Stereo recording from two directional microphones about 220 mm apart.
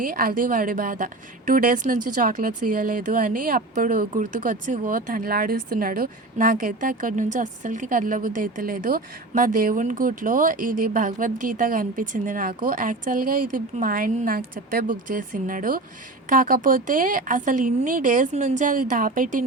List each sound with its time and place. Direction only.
0.0 s speech: 40° right (ahead or behind)